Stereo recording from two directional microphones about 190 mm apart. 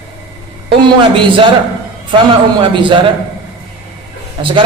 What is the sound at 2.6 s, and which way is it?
Speech, 25° right (ahead or behind).